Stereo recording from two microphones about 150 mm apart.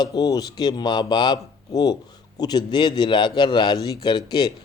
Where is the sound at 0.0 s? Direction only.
25° left (ahead or behind).